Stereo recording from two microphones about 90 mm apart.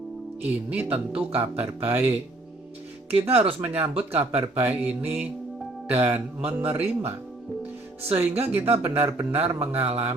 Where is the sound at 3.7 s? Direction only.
20° right (ahead or behind).